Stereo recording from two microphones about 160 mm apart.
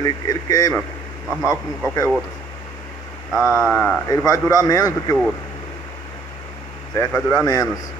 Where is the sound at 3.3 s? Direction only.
5° right (ahead or behind).